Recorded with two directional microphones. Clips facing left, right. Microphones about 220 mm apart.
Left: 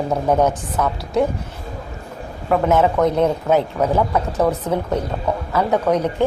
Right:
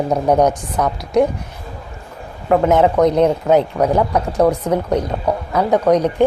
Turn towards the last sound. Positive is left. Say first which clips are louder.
# right 4 dB
turn(degrees=-15)  # may be behind; listen again after turning